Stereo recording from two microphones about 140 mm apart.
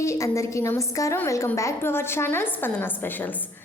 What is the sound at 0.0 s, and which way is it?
A woman's voice, 20° left (ahead or behind).